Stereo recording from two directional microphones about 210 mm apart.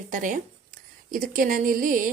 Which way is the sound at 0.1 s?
40° right (ahead or behind).